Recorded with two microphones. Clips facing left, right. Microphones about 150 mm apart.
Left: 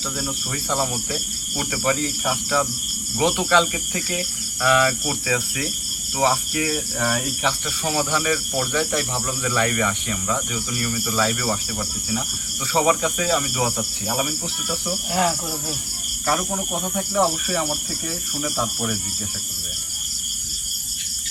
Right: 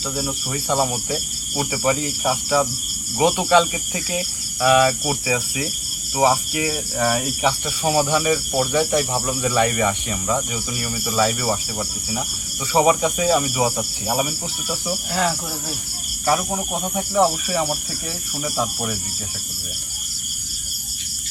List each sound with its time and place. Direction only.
0.2 s speech: 15° right (ahead or behind)
16.2 s speech: 10° right (ahead or behind)
18.5 s speech: 10° right (ahead or behind)